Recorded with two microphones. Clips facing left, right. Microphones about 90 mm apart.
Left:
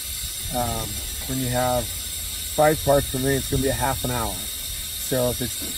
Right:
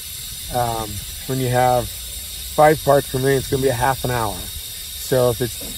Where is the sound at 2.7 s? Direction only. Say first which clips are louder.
Right 3 dB; 90° right.